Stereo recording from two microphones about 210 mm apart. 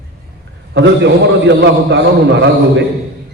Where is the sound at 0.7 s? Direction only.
55° right (ahead or behind).